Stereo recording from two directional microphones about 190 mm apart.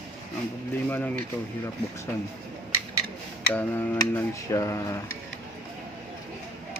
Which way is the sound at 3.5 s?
10° left (ahead or behind).